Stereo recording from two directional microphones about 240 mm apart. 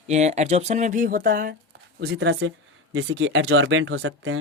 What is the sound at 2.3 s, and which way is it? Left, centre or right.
A woman's voice, right.